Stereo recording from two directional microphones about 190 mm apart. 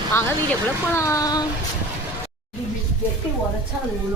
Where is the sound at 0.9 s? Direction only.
15° left (ahead or behind).